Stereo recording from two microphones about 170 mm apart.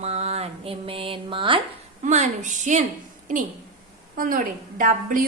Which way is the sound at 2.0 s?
45° right (ahead or behind).